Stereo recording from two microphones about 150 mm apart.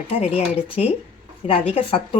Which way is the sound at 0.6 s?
40° left (ahead or behind).